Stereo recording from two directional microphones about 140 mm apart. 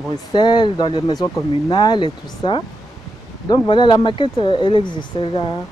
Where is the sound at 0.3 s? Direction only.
30° left (ahead or behind).